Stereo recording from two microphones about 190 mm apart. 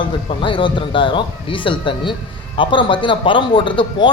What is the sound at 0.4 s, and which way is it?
A man's voice, 25° left (ahead or behind).